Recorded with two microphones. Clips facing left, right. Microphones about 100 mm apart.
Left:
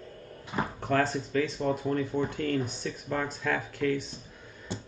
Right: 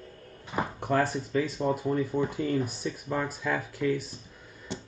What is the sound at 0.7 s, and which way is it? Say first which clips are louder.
Speech: even; 15° right (ahead or behind).